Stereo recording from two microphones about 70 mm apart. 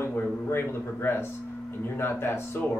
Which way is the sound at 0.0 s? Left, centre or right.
Left.